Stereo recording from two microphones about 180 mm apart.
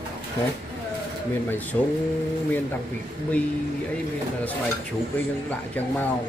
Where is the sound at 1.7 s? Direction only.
15° left (ahead or behind).